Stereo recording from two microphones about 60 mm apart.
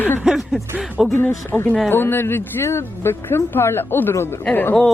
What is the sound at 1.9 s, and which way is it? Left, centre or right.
Speech, left.